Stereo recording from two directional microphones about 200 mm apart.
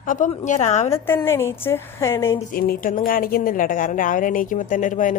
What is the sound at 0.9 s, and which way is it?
A woman's voice, 10° left (ahead or behind).